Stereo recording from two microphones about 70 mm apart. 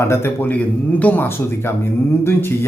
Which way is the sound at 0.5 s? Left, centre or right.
Left.